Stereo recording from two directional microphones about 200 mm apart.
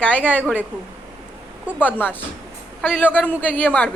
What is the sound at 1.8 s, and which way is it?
A woman's voice, 10° left (ahead or behind).